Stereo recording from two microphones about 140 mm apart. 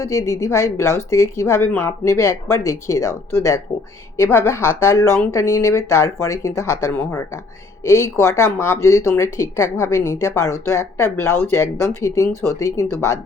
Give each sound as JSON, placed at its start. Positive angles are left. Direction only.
{"t": 0.0, "sound": "speech", "side_deg": 20}